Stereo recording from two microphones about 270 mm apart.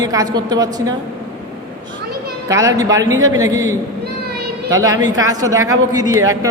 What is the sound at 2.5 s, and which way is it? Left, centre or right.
A man's voice, centre.